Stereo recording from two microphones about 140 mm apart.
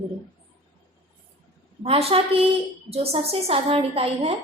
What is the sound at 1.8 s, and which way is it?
A woman's voice, 45° right (ahead or behind).